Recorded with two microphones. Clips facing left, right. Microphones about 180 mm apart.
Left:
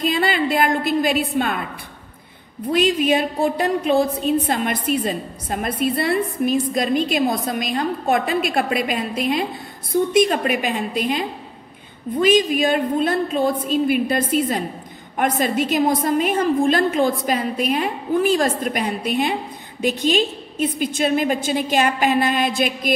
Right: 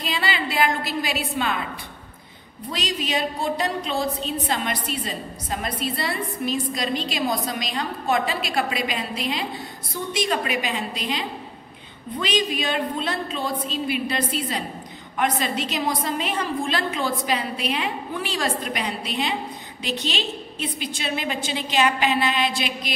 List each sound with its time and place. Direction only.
0.0 s a woman's voice: 50° left (ahead or behind)
2.7 s a woman's voice: 55° left (ahead or behind)